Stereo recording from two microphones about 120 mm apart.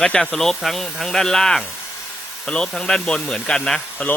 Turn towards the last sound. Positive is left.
turn(degrees=5)  # may be behind; listen again after turning